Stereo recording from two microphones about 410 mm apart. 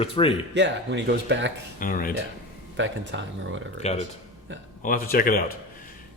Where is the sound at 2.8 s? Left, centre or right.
Right.